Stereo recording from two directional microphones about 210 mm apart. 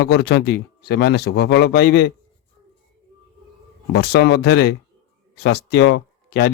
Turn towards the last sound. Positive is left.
turn(degrees=55)  # may be behind; listen again after turning